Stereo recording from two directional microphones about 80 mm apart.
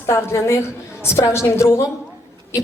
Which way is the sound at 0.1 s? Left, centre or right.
Left.